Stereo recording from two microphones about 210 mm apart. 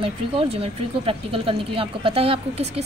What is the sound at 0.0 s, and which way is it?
Speech, 25° right (ahead or behind).